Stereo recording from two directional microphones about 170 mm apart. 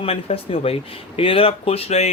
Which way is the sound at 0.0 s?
35° left (ahead or behind).